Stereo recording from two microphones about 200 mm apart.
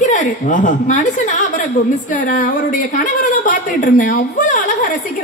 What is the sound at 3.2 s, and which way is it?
A woman's voice, 40° left (ahead or behind).